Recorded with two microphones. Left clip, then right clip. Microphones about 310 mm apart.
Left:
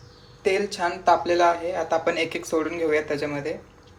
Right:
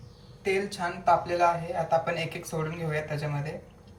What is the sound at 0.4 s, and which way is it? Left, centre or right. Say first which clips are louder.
Speech: left 5 dB; centre.